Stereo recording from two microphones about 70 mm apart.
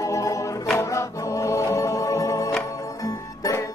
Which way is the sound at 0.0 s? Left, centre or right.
Left.